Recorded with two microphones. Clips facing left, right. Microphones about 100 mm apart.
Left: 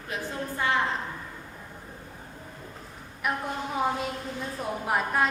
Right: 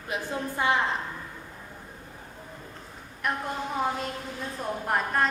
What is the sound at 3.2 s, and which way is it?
A woman's voice, 5° left (ahead or behind).